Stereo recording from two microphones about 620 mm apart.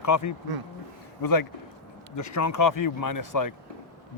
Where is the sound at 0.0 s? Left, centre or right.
Left.